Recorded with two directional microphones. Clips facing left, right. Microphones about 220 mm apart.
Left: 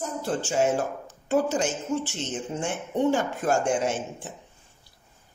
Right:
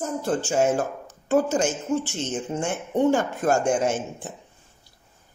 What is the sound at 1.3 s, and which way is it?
Speech, 50° right (ahead or behind).